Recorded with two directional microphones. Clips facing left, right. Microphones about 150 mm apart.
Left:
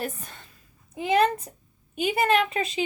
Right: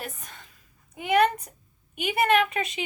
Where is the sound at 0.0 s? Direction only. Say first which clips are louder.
Left 6 dB; 35° left (ahead or behind).